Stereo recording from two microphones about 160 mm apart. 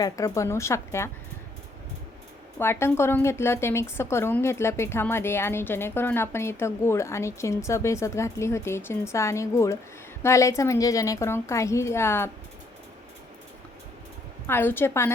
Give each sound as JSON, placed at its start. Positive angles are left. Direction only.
{"t": 0.0, "sound": "a woman's voice", "side_deg": 20}
{"t": 2.6, "sound": "a woman's voice", "side_deg": 15}
{"t": 14.4, "sound": "a woman's voice", "side_deg": 15}